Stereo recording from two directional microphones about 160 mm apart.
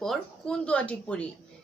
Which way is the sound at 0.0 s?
5° left (ahead or behind).